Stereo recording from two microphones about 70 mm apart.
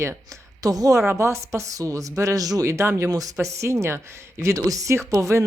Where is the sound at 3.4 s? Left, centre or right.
Right.